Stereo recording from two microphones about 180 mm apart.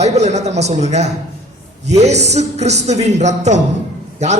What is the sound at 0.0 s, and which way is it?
Speech, 40° right (ahead or behind).